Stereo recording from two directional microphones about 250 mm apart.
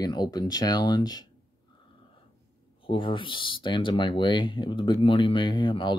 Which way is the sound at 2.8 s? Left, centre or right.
Centre.